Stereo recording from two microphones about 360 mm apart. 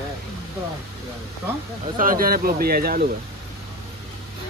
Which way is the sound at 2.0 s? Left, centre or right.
Right.